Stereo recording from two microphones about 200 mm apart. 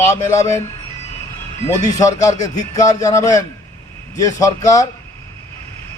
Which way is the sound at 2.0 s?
15° left (ahead or behind).